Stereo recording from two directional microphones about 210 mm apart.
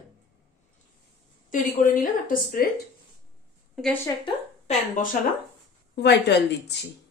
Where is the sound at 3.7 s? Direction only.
5° left (ahead or behind).